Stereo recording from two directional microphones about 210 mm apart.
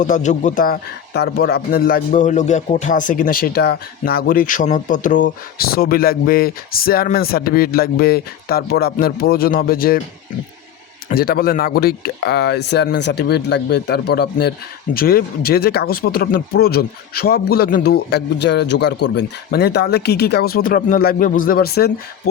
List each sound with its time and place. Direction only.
0.0 s a man's voice: 35° left (ahead or behind)
11.1 s a man's voice: 45° left (ahead or behind)